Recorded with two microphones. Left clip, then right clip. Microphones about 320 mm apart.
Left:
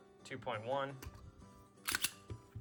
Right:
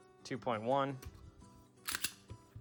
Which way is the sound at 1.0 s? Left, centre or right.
Centre.